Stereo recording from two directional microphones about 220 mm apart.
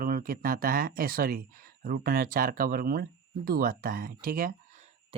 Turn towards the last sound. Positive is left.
turn(degrees=-30)  # may be behind; listen again after turning